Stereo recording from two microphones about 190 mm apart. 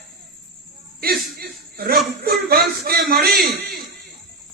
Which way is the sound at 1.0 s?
55° right (ahead or behind).